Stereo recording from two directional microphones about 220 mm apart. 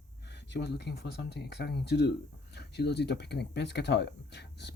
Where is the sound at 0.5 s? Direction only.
50° left (ahead or behind).